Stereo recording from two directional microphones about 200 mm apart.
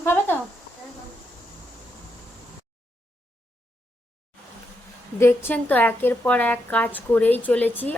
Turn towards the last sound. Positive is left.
turn(degrees=10)  # may be behind; listen again after turning